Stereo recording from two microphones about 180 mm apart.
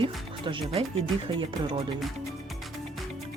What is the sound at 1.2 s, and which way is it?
Speech, 30° right (ahead or behind).